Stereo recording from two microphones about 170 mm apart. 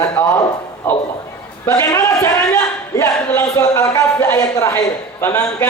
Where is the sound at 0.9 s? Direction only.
10° left (ahead or behind).